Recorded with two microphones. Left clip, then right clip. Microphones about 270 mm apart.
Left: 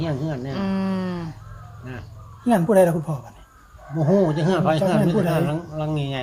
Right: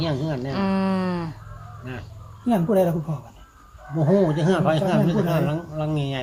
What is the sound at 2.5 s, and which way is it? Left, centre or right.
Speech, left.